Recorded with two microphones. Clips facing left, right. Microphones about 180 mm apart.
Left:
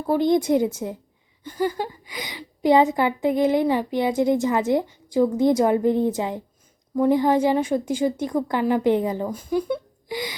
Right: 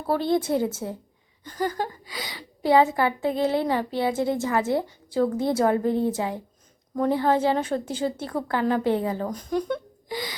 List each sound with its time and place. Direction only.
0.1 s a woman's voice: 15° left (ahead or behind)